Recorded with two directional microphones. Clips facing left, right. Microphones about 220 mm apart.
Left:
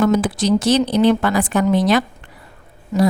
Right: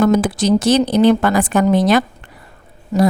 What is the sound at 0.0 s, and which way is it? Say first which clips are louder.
A woman's voice: right 2 dB; 45° right (ahead or behind).